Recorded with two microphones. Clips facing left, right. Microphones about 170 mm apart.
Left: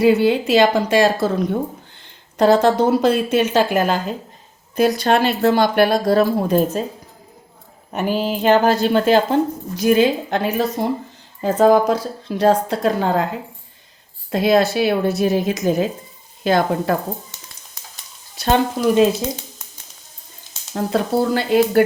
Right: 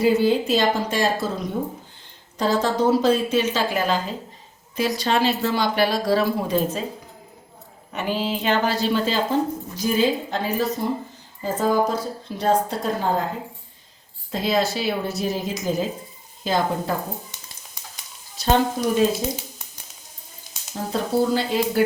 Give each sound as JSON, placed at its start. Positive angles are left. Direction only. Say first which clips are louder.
{"t": 0.0, "sound": "speech", "louder": "left 4 dB", "side_deg": 65}
{"t": 2.4, "sound": "speech", "louder": "left 7 dB", "side_deg": 70}
{"t": 7.9, "sound": "speech", "louder": "left 4 dB", "side_deg": 45}
{"t": 11.3, "sound": "speech", "louder": "left 7 dB", "side_deg": 75}
{"t": 14.3, "sound": "speech", "louder": "left 7 dB", "side_deg": 60}
{"t": 18.8, "sound": "speech", "louder": "left 6 dB", "side_deg": 90}
{"t": 20.7, "sound": "speech", "louder": "left 4 dB", "side_deg": 65}